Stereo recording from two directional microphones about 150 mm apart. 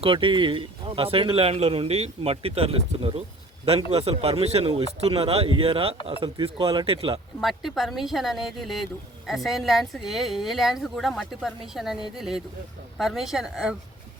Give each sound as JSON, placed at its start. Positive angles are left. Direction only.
{"t": 0.0, "sound": "speech", "side_deg": -35}
{"t": 7.4, "sound": "speech", "side_deg": 0}